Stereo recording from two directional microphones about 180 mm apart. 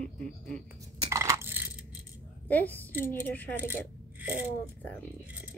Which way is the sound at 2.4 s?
10° left (ahead or behind).